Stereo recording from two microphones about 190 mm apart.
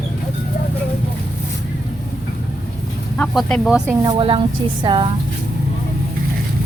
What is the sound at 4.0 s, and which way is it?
A woman's voice, 25° right (ahead or behind).